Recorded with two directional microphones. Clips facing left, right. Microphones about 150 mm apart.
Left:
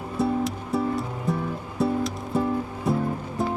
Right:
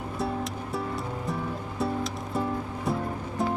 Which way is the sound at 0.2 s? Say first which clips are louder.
Left 7 dB; centre (ahead or behind).